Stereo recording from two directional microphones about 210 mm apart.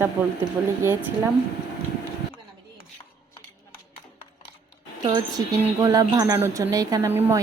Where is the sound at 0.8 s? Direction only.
10° right (ahead or behind).